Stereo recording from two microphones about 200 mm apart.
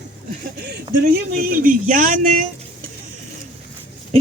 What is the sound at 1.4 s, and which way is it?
Speech, 45° right (ahead or behind).